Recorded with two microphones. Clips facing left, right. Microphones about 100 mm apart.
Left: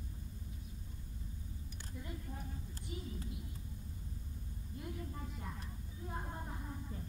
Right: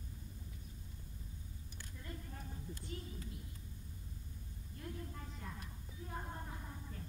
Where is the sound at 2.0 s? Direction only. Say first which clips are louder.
Left 2 dB; 15° left (ahead or behind).